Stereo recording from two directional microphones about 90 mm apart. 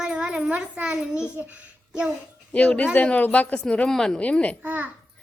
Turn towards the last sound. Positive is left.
turn(degrees=-20)  # may be behind; listen again after turning